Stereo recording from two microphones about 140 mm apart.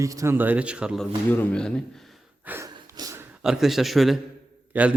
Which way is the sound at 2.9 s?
25° right (ahead or behind).